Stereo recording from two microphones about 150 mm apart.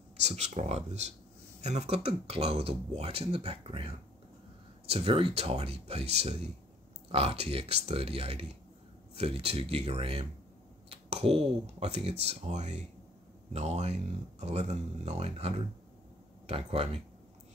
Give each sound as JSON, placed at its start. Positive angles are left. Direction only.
{"t": 0.2, "sound": "speech", "side_deg": -45}